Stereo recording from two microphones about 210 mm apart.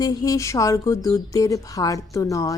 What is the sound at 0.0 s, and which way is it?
Speech, 15° left (ahead or behind).